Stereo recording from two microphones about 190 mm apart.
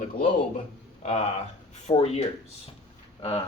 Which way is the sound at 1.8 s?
35° left (ahead or behind).